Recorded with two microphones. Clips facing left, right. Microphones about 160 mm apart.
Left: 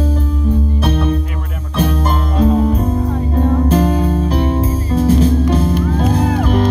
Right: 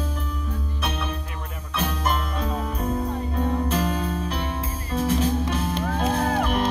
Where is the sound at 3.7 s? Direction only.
40° left (ahead or behind).